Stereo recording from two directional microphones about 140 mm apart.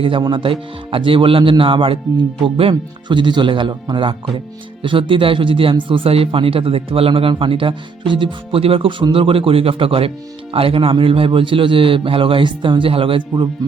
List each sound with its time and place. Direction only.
0.0 s speech: 35° right (ahead or behind)